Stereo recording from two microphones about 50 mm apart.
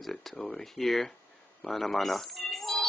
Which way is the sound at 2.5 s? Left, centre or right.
Centre.